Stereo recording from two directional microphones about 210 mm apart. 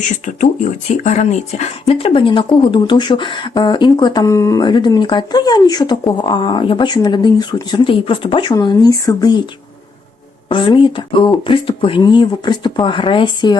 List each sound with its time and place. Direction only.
0.3 s speech: 35° left (ahead or behind); by 9.4 s 20° left (ahead or behind)
10.5 s speech: 25° left (ahead or behind)